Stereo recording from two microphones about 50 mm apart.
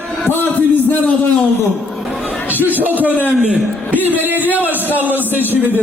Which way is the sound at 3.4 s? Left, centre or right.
Centre.